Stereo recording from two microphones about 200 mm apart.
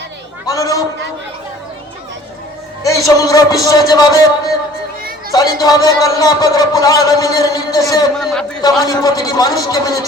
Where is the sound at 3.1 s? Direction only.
20° left (ahead or behind).